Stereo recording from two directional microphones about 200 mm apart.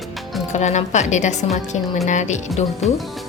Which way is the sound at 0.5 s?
35° left (ahead or behind).